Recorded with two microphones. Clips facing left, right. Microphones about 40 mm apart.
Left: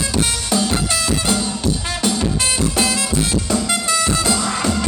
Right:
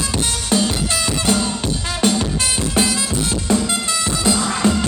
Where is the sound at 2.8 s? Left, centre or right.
Left.